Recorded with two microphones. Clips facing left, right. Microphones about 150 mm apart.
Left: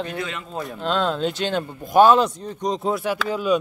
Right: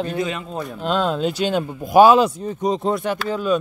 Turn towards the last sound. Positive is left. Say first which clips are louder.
# right 1 dB
turn(degrees=10)  # may be behind; listen again after turning